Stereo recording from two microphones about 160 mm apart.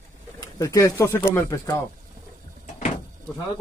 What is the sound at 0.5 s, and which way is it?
Speech, 20° left (ahead or behind).